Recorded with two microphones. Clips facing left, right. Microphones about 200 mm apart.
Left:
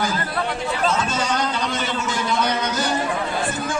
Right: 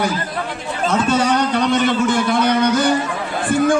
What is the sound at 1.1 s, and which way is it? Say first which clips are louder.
Speech: right 7 dB; 65° right (ahead or behind).